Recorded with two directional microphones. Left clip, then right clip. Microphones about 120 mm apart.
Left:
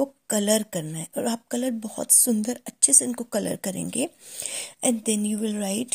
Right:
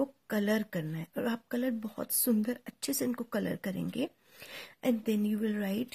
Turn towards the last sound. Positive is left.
turn(degrees=35)  # may be behind; listen again after turning